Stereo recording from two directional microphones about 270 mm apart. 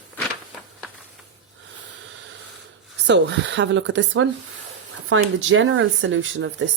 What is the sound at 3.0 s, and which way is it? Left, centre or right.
Speech, right.